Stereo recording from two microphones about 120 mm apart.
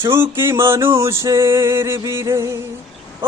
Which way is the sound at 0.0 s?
20° right (ahead or behind).